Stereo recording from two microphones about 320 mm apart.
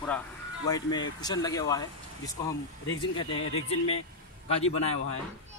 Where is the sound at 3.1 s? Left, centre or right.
Centre.